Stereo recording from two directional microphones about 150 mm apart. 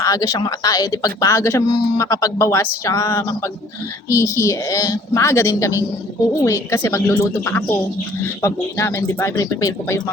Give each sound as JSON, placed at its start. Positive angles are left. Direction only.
{"t": 0.0, "sound": "speech", "side_deg": 25}